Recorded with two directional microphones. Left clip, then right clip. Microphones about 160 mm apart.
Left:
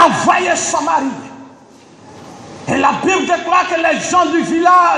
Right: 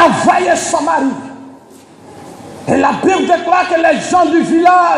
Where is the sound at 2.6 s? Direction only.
30° right (ahead or behind).